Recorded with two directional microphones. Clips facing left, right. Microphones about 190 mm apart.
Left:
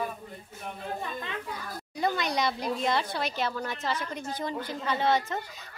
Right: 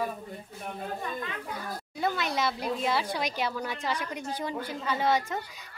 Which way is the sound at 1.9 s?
5° right (ahead or behind).